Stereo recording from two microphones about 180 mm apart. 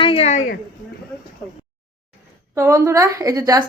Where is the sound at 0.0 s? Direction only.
30° left (ahead or behind).